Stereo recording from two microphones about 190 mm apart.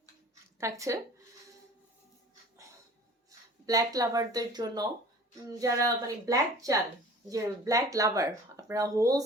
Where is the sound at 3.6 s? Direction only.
20° right (ahead or behind).